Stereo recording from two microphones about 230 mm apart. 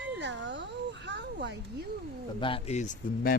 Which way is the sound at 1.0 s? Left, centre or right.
Right.